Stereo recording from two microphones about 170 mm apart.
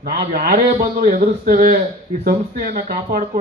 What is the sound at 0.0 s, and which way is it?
A man's voice, 60° right (ahead or behind).